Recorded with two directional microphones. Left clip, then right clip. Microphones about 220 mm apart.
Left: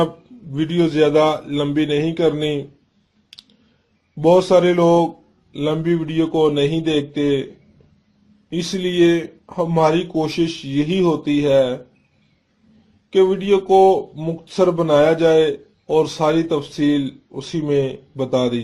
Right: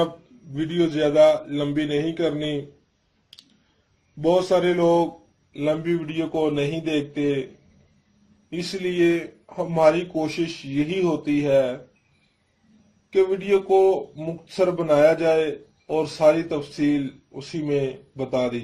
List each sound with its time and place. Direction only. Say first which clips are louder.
0.5 s speech: left 5 dB; 45° left (ahead or behind)
4.2 s speech: left 6 dB; 45° left (ahead or behind)
8.4 s speech: left 4 dB; 50° left (ahead or behind)
13.1 s speech: left 5 dB; 50° left (ahead or behind)